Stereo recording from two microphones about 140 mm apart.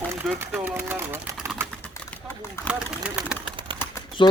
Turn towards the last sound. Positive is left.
turn(degrees=35)  # may be behind; listen again after turning